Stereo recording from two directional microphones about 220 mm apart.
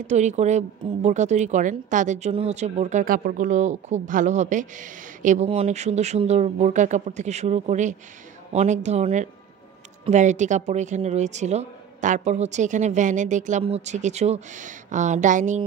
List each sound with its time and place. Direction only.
0.0 s speech: 30° right (ahead or behind)